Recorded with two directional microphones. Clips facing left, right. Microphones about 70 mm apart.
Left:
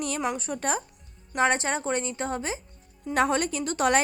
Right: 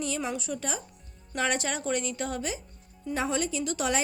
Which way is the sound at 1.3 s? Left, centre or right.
Left.